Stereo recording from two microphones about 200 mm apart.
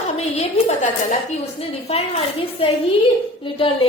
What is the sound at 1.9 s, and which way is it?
A woman's voice, 30° left (ahead or behind).